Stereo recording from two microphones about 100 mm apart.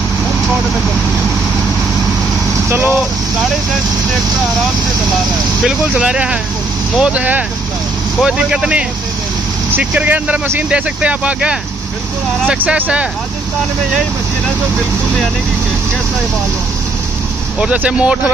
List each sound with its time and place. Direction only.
2.7 s speech: 20° right (ahead or behind)
5.7 s speech: 10° right (ahead or behind)
17.6 s speech: 10° right (ahead or behind)